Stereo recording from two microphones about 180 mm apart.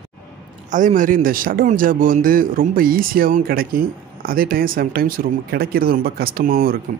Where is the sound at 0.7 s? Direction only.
45° right (ahead or behind).